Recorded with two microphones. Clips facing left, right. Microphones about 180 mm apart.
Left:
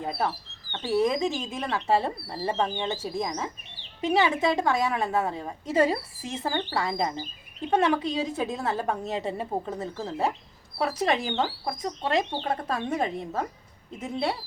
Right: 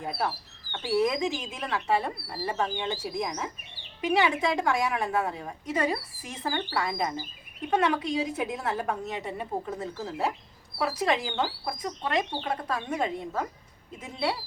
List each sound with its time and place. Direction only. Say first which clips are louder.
0.7 s speech: left 1 dB; 10° right (ahead or behind)
0.9 s a woman's voice: left 2 dB; 25° left (ahead or behind)